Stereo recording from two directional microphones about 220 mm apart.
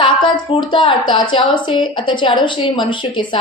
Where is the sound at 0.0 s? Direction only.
20° left (ahead or behind).